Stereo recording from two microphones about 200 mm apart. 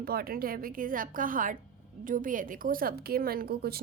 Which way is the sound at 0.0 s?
50° right (ahead or behind).